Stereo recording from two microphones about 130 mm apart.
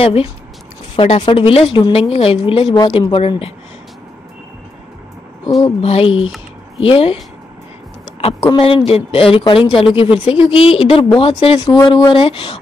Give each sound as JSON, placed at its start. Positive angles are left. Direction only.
{"t": 0.0, "sound": "a woman's voice", "side_deg": 45}
{"t": 5.8, "sound": "a woman's voice", "side_deg": 50}
{"t": 8.2, "sound": "a woman's voice", "side_deg": 45}
{"t": 11.7, "sound": "speech", "side_deg": 30}
{"t": 12.1, "sound": "a woman's voice", "side_deg": 45}